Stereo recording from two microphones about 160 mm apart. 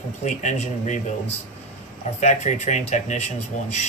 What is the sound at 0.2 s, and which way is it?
Speech, 50° left (ahead or behind).